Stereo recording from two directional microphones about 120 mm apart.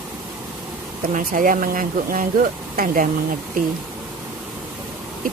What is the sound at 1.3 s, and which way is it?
Speech, 90° right.